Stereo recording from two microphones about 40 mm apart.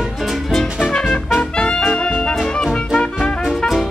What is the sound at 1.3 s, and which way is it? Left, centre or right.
Music, left.